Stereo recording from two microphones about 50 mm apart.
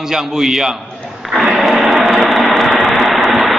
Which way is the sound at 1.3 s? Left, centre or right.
Centre.